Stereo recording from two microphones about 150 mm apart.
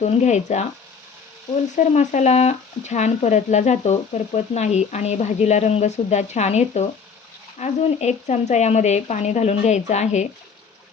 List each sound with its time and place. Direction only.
0.0 s speech: 50° left (ahead or behind)
1.7 s speech: 50° left (ahead or behind)